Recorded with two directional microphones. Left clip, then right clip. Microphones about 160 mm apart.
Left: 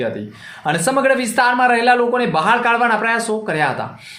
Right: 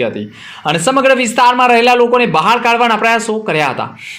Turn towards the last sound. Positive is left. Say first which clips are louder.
# right 4 dB
turn(degrees=-15)  # may be behind; listen again after turning